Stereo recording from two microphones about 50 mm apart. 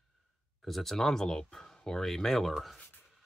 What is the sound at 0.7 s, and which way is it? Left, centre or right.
Speech, centre.